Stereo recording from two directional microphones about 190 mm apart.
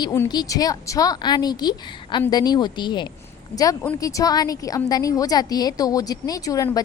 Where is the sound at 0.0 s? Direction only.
20° left (ahead or behind).